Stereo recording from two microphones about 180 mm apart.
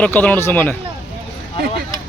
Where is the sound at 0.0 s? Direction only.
10° left (ahead or behind).